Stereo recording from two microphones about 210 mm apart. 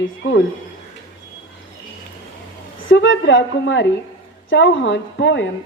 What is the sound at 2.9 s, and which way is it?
A woman's voice, 60° left (ahead or behind).